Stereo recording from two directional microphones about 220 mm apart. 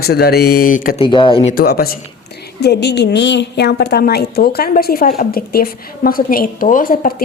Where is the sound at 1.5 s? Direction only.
45° left (ahead or behind).